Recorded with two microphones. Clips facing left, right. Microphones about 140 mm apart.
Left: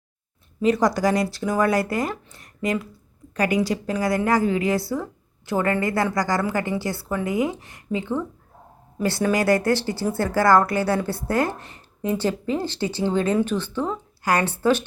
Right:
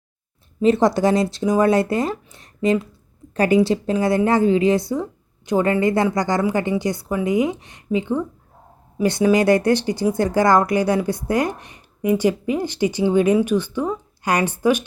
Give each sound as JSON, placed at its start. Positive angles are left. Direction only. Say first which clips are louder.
{"t": 0.6, "sound": "a woman's voice", "louder": "right 4 dB", "side_deg": -25}